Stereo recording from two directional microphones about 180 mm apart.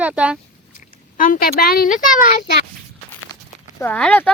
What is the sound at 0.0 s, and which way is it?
Speech, 5° right (ahead or behind).